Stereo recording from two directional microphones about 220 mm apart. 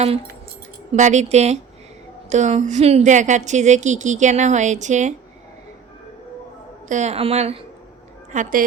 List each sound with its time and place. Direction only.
0.9 s a woman's voice: 30° right (ahead or behind)
6.8 s a woman's voice: 30° right (ahead or behind)